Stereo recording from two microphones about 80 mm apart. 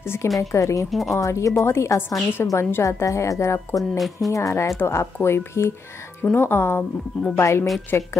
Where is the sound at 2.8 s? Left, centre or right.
Left.